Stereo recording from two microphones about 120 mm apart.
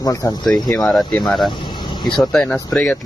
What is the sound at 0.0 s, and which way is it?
Speech, 25° left (ahead or behind).